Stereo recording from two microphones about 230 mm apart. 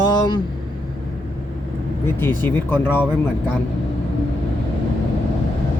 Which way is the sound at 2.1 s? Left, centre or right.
Centre.